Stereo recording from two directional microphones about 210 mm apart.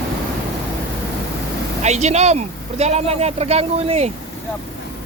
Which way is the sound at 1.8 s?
30° right (ahead or behind).